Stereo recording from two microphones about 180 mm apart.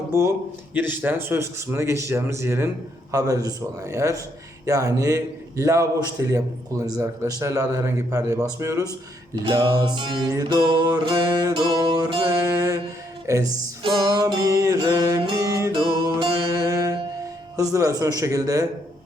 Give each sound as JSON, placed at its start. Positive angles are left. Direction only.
{"t": 0.7, "sound": "a man's voice", "side_deg": -10}
{"t": 3.1, "sound": "music", "side_deg": -20}
{"t": 4.6, "sound": "a man's voice", "side_deg": -15}
{"t": 9.3, "sound": "music", "side_deg": -25}
{"t": 17.6, "sound": "a man's voice", "side_deg": -20}